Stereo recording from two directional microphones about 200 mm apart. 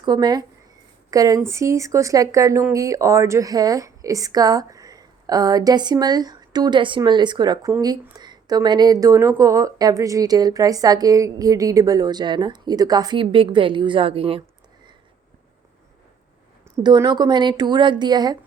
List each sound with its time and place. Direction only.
0.0 s speech: 20° right (ahead or behind)
16.8 s speech: 20° right (ahead or behind)